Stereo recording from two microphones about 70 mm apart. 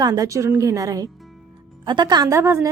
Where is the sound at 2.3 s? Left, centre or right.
Right.